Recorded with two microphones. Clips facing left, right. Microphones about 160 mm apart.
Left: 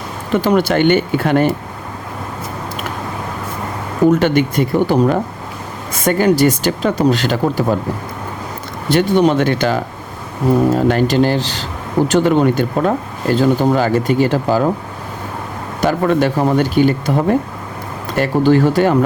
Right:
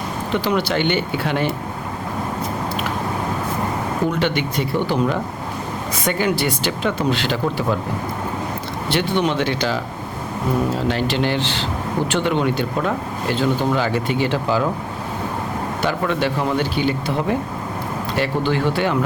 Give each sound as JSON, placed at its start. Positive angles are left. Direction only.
{"t": 0.3, "sound": "speech", "side_deg": 45}
{"t": 4.1, "sound": "speech", "side_deg": 45}
{"t": 8.9, "sound": "speech", "side_deg": 45}
{"t": 15.8, "sound": "speech", "side_deg": 45}